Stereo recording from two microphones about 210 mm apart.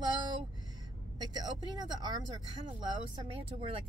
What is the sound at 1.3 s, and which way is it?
Speech, 20° right (ahead or behind).